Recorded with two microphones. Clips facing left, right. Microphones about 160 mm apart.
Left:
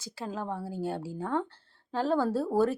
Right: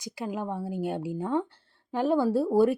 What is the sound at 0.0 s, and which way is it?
Speech, 15° right (ahead or behind).